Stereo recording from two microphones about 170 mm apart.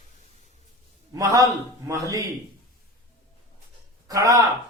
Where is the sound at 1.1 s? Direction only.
20° right (ahead or behind).